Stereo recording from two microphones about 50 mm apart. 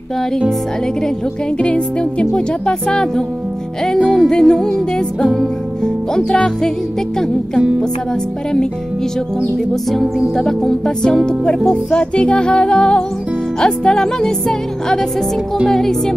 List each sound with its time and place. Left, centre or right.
1.6 s music: left
10.3 s music: centre